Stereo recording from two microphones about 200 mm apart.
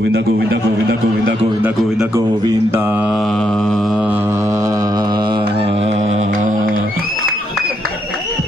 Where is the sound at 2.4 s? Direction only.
15° right (ahead or behind); by 6.8 s 40° right (ahead or behind).